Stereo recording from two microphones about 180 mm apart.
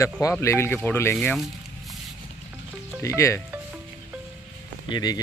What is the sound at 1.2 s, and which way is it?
Speech, centre (ahead or behind).